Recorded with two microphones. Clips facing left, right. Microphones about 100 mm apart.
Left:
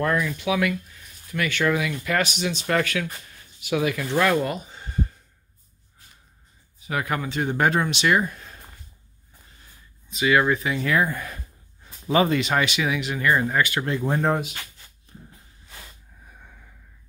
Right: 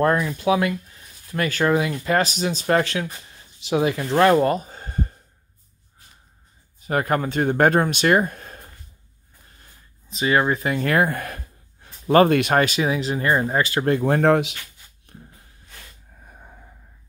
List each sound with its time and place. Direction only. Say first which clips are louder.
0.0 s speech: right 4 dB; 35° right (ahead or behind)
6.8 s speech: right 5 dB; 45° right (ahead or behind)
10.0 s speech: even; 35° right (ahead or behind)
10.7 s speech: right 3 dB; 55° right (ahead or behind)
12.6 s speech: right 3 dB; 35° right (ahead or behind)
13.8 s speech: right 6 dB; 60° right (ahead or behind)
15.1 s a sound: right 1 dB; 60° right (ahead or behind)
16.3 s a sound: right 4 dB; 30° right (ahead or behind)